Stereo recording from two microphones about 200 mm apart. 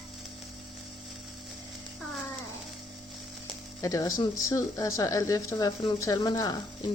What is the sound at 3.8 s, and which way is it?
Speech, 15° left (ahead or behind).